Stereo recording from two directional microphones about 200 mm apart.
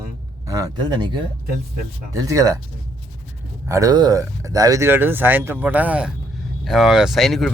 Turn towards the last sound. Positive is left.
turn(degrees=0)  # may be behind; listen again after turning